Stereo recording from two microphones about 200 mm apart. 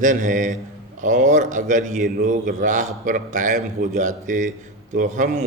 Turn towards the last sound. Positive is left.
turn(degrees=-40)  # may be behind; listen again after turning